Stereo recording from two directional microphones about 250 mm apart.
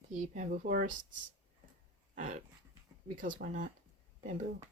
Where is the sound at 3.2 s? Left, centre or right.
Right.